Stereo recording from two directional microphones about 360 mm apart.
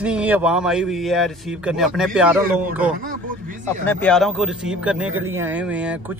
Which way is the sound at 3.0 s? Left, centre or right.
Right.